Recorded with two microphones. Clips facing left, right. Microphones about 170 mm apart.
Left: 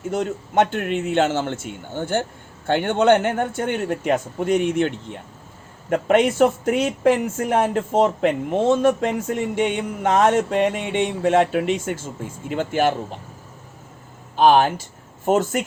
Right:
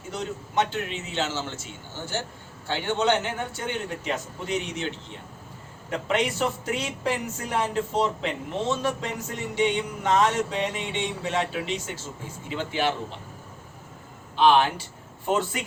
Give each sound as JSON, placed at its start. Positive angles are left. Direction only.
{"t": 0.1, "sound": "a man's voice", "side_deg": 55}
{"t": 14.3, "sound": "speech", "side_deg": 45}